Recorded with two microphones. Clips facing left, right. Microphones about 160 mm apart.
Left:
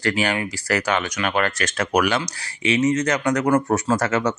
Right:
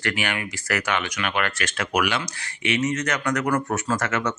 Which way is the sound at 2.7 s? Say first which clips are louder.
Left 5 dB; 30° left (ahead or behind).